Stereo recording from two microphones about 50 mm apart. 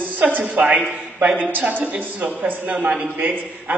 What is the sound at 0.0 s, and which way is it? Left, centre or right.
A man's voice, right.